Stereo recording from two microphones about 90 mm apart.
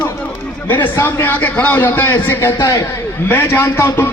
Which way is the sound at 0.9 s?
25° left (ahead or behind).